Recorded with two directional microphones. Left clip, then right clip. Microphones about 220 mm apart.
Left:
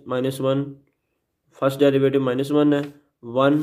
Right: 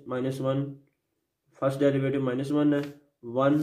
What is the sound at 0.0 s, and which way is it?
Speech, 35° left (ahead or behind).